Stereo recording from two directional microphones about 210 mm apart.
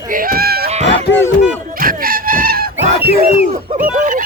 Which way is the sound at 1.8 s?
40° right (ahead or behind).